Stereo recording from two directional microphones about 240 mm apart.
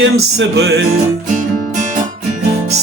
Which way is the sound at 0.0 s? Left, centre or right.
Right.